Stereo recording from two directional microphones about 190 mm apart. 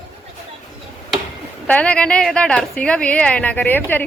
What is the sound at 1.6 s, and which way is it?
A woman's voice, 5° left (ahead or behind).